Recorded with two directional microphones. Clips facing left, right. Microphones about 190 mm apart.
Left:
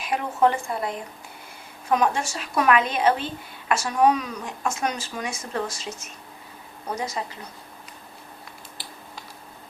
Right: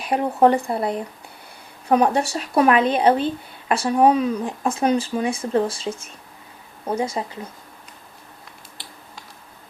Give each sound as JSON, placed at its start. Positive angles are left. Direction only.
{"t": 0.0, "sound": "speech", "side_deg": -35}